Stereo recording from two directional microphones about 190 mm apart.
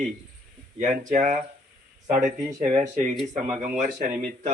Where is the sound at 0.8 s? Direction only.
45° right (ahead or behind).